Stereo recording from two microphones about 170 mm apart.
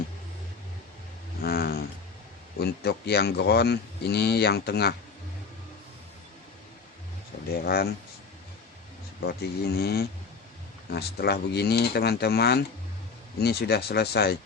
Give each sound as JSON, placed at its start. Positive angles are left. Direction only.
{"t": 1.4, "sound": "a sound", "side_deg": 65}
{"t": 2.6, "sound": "speech", "side_deg": 70}
{"t": 7.7, "sound": "speech", "side_deg": 65}
{"t": 9.2, "sound": "speech", "side_deg": 70}